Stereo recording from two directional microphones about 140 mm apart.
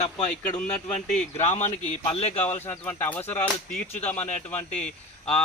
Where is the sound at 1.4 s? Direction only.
50° left (ahead or behind).